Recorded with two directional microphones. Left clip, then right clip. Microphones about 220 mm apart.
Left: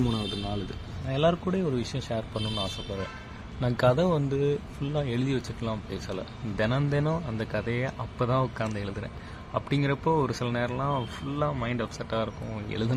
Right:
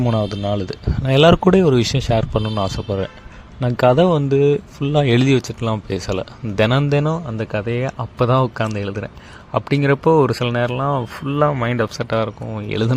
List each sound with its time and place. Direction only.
0.1 s speech: 35° right (ahead or behind)
1.0 s speech: 50° right (ahead or behind); by 12.9 s 35° right (ahead or behind)